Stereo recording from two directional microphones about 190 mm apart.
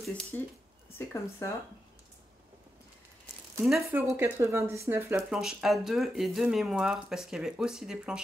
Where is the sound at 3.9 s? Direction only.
15° right (ahead or behind).